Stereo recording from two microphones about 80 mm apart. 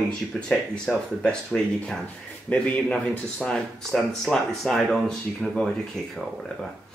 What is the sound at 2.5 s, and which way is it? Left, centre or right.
Speech, centre.